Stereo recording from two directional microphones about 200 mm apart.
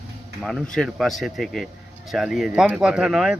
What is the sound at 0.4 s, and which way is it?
Speech, centre (ahead or behind).